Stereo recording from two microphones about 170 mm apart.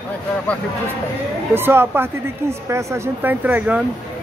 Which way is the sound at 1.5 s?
15° right (ahead or behind).